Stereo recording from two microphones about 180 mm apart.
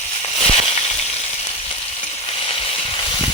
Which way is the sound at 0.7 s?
35° left (ahead or behind).